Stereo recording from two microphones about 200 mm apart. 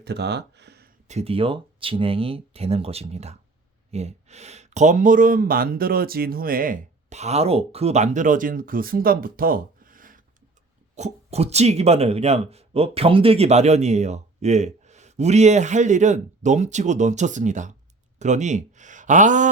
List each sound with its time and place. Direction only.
0.0 s speech: 55° right (ahead or behind)
1.0 s speech: 30° right (ahead or behind)
10.9 s speech: 35° right (ahead or behind)